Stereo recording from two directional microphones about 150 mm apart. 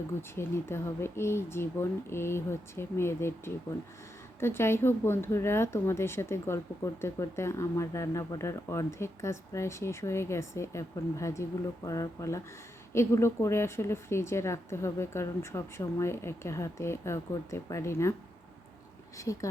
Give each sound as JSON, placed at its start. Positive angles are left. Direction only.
{"t": 0.2, "sound": "speech", "side_deg": 15}
{"t": 19.1, "sound": "speech", "side_deg": 20}